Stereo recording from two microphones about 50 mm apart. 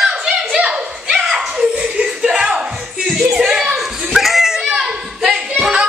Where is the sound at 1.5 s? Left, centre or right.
Centre.